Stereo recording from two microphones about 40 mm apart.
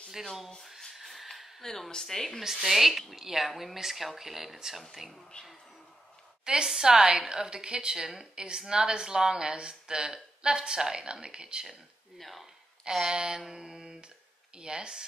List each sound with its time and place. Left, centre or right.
0.9 s a sound: centre
1.6 s speech: centre
2.4 s speech: centre
6.4 s a woman's voice: centre
11.6 s speech: centre
12.8 s mantra: centre
14.6 s speech: centre